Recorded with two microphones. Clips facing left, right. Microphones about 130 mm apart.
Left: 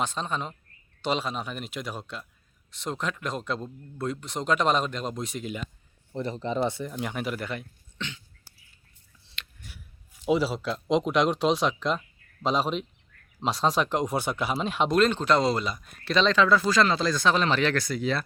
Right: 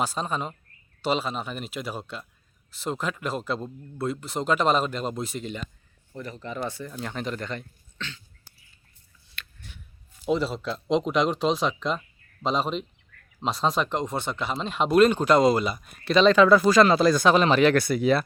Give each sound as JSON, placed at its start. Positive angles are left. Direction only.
{"t": 0.0, "sound": "speech", "side_deg": -5}
{"t": 6.1, "sound": "speech", "side_deg": 25}
{"t": 7.9, "sound": "a sound", "side_deg": 20}
{"t": 10.2, "sound": "speech", "side_deg": 5}
{"t": 17.0, "sound": "speech", "side_deg": -50}
{"t": 17.2, "sound": "speech", "side_deg": -15}